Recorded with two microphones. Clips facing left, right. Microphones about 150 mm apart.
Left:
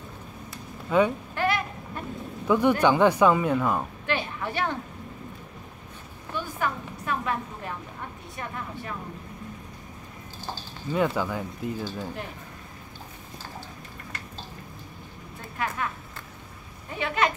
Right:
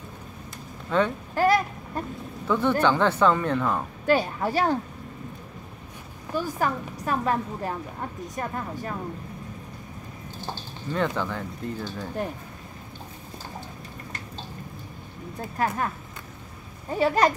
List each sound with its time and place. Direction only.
0.8 s speech: 10° left (ahead or behind)
1.3 s a sound: 40° right (ahead or behind)
2.4 s speech: 15° left (ahead or behind)
4.0 s a woman's voice: 40° right (ahead or behind)
6.3 s a woman's voice: 40° right (ahead or behind)
10.9 s speech: 10° left (ahead or behind)
15.3 s speech: 40° right (ahead or behind)
16.9 s a woman's voice: 40° right (ahead or behind)